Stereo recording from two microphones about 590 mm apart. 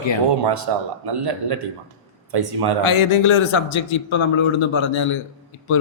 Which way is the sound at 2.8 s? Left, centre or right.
Left.